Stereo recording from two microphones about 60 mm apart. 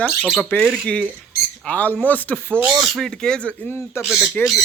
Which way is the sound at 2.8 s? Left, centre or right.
Centre.